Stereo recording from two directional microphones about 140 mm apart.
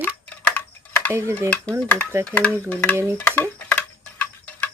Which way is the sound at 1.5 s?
10° left (ahead or behind).